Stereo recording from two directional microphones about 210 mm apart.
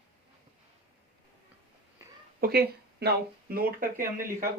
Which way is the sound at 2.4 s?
45° right (ahead or behind).